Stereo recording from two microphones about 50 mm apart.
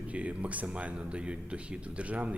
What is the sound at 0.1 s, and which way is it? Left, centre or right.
Speech, right.